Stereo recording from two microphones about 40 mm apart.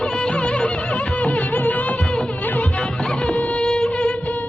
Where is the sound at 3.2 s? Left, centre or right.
Left.